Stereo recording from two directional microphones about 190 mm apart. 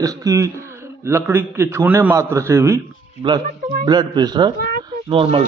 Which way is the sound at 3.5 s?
45° right (ahead or behind).